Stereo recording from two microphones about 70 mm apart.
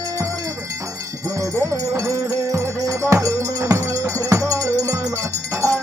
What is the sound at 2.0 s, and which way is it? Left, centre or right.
Music, right.